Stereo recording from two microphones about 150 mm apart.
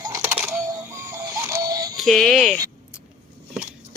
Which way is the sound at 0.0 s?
20° right (ahead or behind).